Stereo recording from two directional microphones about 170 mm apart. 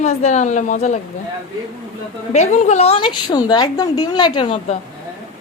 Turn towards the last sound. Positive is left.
turn(degrees=30)  # may be behind; listen again after turning